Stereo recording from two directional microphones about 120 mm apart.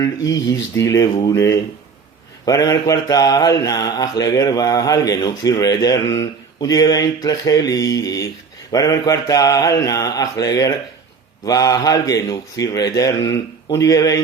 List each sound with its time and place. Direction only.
0.5 s speech: 30° left (ahead or behind)
2.4 s mantra: 30° left (ahead or behind)
8.7 s speech: 30° left (ahead or behind)